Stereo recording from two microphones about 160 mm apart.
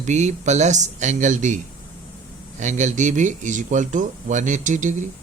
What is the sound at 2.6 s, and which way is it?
Speech, 50° right (ahead or behind).